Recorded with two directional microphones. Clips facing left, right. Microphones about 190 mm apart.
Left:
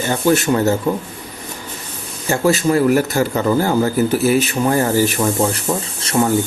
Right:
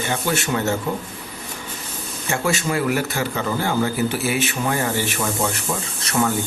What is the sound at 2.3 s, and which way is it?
Speech, 35° left (ahead or behind).